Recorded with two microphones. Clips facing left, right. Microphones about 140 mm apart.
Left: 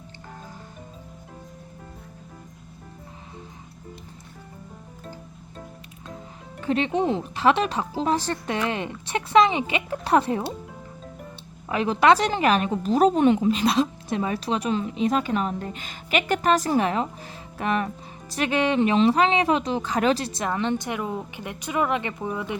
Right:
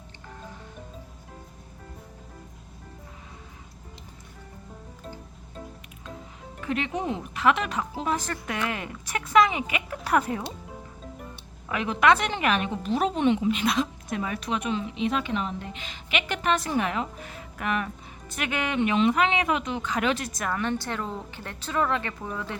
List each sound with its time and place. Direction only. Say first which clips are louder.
6.6 s speech: left 6 dB; 30° left (ahead or behind)
11.7 s a woman's voice: left 3 dB; 30° left (ahead or behind); by 22.5 s 15° left (ahead or behind)